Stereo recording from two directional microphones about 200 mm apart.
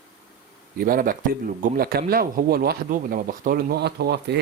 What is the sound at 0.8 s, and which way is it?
Speech, 45° right (ahead or behind).